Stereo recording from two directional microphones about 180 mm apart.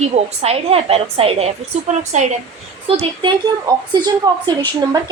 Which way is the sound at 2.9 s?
30° right (ahead or behind).